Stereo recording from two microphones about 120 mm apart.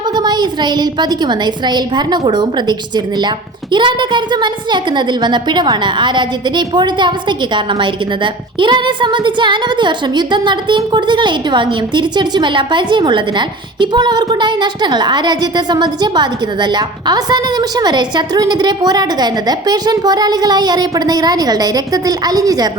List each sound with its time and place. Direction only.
0.2 s a woman's voice: 35° right (ahead or behind)